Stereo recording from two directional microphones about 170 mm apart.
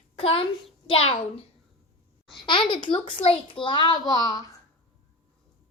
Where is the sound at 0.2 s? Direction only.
35° left (ahead or behind).